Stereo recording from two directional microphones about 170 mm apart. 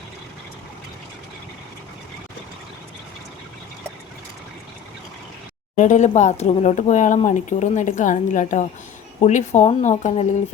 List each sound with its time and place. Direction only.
5.7 s speech: 45° left (ahead or behind)